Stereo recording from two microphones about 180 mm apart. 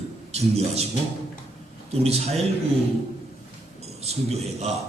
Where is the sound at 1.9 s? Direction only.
35° right (ahead or behind).